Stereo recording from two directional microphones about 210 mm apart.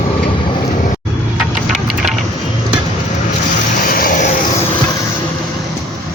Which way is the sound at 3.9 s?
45° left (ahead or behind).